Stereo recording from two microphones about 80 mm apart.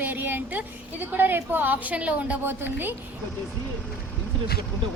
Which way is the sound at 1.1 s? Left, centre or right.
Right.